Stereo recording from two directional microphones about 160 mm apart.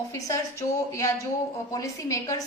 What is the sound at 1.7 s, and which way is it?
Speech, 20° left (ahead or behind).